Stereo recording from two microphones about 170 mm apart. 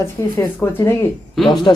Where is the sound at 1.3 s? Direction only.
Centre (ahead or behind).